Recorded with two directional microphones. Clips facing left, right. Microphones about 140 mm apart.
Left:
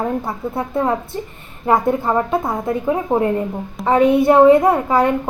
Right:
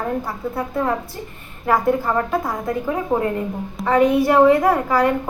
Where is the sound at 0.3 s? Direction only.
25° left (ahead or behind).